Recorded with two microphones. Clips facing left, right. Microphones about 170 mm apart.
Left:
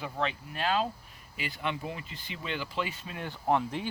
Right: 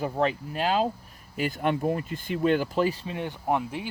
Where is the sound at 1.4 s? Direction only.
50° right (ahead or behind); by 3.4 s 20° right (ahead or behind).